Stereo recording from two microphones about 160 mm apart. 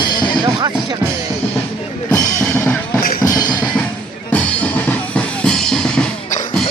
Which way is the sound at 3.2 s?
25° left (ahead or behind).